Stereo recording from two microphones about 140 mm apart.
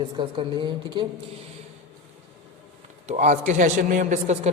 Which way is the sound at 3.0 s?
55° right (ahead or behind).